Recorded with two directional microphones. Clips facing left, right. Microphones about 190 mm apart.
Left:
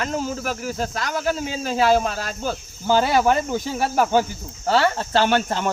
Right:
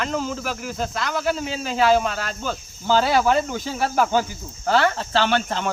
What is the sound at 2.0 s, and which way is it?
Speech, 40° left (ahead or behind).